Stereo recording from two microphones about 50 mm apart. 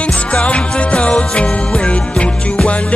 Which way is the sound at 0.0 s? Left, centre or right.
Left.